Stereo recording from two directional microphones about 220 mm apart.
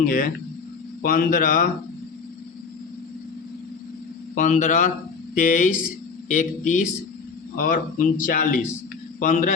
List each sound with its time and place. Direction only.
0.0 s speech: 40° left (ahead or behind)
4.4 s speech: 35° left (ahead or behind)